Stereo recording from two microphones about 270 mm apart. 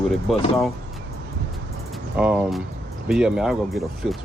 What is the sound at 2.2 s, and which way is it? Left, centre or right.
Speech, centre.